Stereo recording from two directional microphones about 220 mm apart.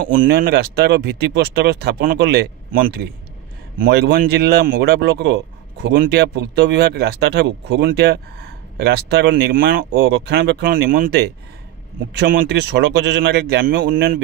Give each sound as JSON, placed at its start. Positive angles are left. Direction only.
{"t": 0.1, "sound": "speech", "side_deg": -40}